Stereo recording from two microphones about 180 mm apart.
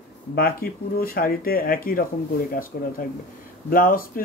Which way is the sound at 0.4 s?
55° left (ahead or behind).